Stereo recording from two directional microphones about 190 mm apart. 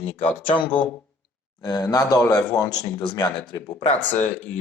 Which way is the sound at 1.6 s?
20° left (ahead or behind).